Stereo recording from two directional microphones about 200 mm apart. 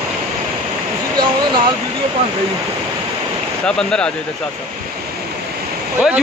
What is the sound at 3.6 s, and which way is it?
Speech, 5° left (ahead or behind).